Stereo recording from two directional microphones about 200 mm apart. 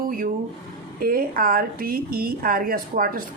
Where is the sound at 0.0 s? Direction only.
45° right (ahead or behind).